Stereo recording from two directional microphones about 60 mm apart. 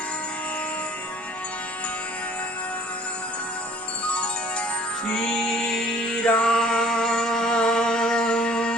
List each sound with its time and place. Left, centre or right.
4.1 s music: centre